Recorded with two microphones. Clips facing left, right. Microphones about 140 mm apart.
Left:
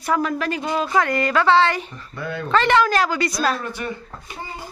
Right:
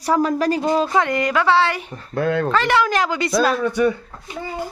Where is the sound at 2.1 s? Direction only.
90° right.